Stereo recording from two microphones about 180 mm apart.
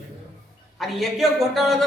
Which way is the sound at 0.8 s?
Centre (ahead or behind).